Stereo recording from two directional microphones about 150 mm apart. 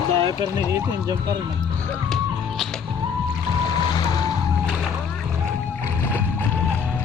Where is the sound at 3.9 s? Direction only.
25° left (ahead or behind).